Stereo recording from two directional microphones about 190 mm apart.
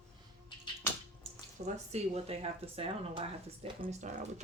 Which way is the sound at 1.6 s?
35° right (ahead or behind).